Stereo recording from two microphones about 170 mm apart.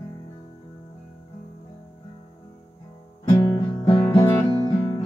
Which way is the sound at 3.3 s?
25° left (ahead or behind).